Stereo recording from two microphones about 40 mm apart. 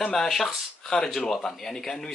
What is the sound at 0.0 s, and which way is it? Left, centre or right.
Speech, centre.